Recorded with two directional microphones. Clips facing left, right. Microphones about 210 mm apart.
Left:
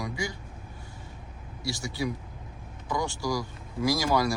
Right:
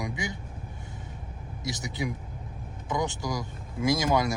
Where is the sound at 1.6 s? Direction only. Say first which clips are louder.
Left 1 dB; 20° right (ahead or behind).